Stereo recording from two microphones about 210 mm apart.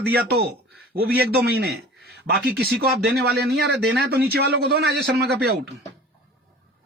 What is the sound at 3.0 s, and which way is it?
A man's voice, 50° right (ahead or behind).